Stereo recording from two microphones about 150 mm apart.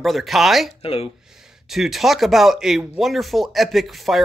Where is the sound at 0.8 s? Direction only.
40° left (ahead or behind).